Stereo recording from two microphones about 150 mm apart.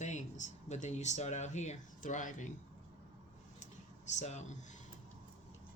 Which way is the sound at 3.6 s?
50° left (ahead or behind).